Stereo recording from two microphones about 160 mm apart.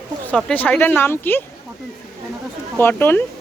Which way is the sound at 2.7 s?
15° left (ahead or behind).